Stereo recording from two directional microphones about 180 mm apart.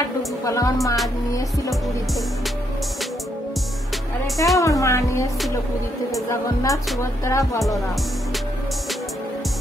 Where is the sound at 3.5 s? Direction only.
Centre (ahead or behind).